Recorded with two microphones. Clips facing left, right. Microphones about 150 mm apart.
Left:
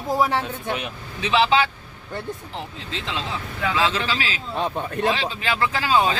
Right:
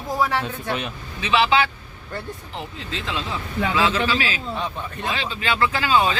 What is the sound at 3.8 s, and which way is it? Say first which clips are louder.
Speech: right 2 dB; 25° left (ahead or behind).